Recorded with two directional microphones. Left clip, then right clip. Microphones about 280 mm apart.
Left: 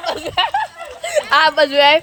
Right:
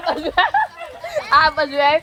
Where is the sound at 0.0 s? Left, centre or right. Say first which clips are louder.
Right 1 dB; left.